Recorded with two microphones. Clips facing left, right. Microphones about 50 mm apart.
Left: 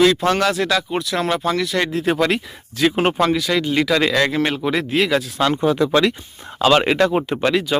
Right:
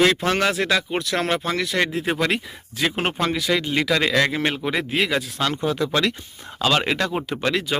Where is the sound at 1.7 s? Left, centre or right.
Centre.